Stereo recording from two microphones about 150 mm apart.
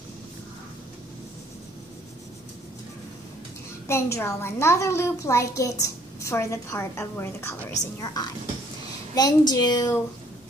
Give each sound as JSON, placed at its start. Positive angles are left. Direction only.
{"t": 3.8, "sound": "a woman's voice", "side_deg": 20}